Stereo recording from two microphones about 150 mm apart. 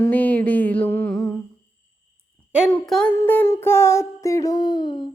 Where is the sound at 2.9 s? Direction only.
5° left (ahead or behind).